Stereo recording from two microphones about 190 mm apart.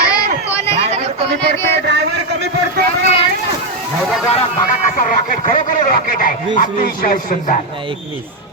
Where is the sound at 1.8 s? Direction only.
60° right (ahead or behind).